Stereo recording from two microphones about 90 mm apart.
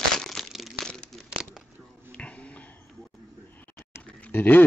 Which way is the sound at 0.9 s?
5° left (ahead or behind).